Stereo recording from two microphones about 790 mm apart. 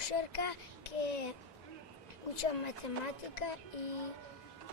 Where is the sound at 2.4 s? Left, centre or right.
Left.